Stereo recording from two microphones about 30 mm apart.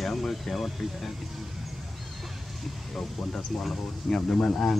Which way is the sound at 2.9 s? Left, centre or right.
Centre.